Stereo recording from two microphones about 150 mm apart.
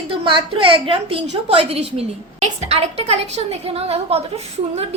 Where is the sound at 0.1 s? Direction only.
35° right (ahead or behind).